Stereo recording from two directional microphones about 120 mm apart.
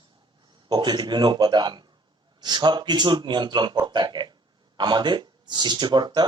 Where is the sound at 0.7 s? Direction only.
35° right (ahead or behind).